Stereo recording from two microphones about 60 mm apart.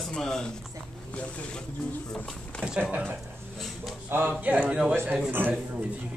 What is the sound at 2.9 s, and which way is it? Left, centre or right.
Speech, right.